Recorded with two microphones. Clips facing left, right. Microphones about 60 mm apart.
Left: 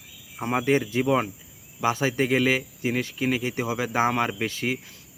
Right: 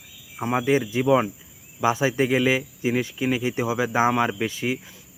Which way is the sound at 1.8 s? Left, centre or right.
Centre.